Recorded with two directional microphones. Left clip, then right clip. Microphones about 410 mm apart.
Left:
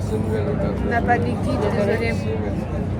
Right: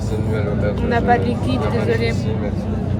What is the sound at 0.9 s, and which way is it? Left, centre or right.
Speech, centre.